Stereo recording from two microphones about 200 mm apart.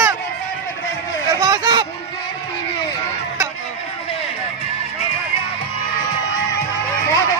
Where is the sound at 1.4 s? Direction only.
20° right (ahead or behind).